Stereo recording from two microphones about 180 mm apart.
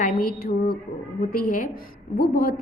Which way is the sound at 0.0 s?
55° left (ahead or behind).